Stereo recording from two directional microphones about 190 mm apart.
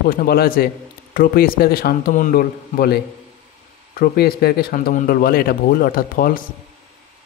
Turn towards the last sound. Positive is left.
turn(degrees=50)  # may be behind; listen again after turning